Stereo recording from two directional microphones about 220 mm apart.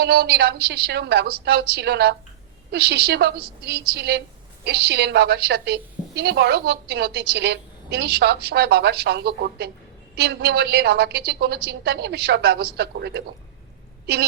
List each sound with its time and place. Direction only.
0.0 s a woman's voice: 50° right (ahead or behind)